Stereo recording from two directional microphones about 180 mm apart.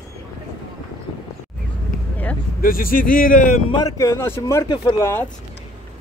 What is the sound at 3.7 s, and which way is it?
Speech, 20° left (ahead or behind).